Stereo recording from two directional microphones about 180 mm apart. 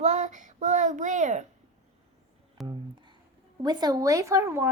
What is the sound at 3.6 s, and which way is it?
Speech, 20° right (ahead or behind).